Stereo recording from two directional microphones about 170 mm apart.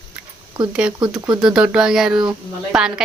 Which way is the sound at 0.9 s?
25° right (ahead or behind).